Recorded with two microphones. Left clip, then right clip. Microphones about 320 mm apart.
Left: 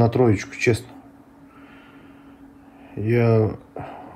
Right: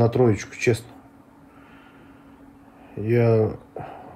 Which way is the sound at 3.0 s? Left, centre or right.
Centre.